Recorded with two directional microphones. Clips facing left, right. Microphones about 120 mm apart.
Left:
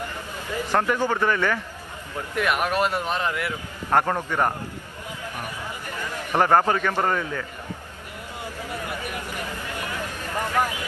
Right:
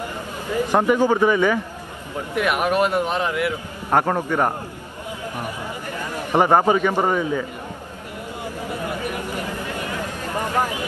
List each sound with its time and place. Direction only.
0.7 s a man's voice: 15° right (ahead or behind)
6.3 s a man's voice: 15° right (ahead or behind)
8.8 s a sound: 15° right (ahead or behind)